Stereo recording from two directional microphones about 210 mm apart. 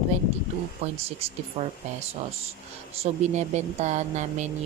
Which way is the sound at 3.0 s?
35° right (ahead or behind).